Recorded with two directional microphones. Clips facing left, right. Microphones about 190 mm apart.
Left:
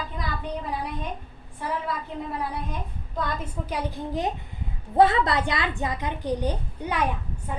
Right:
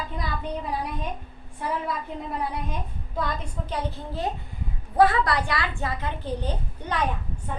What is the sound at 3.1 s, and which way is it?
A woman's voice, 10° left (ahead or behind).